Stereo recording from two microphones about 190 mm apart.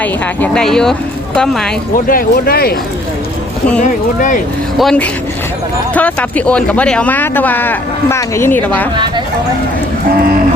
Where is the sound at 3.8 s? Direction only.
40° left (ahead or behind).